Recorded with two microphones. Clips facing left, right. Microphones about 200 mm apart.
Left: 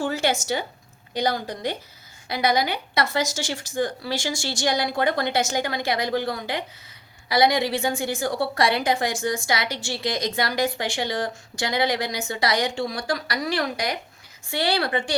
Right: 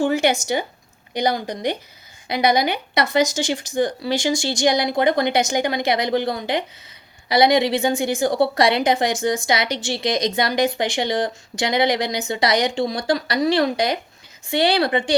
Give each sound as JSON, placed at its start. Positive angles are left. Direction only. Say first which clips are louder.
{"t": 0.0, "sound": "a woman's voice", "louder": "right 5 dB", "side_deg": -15}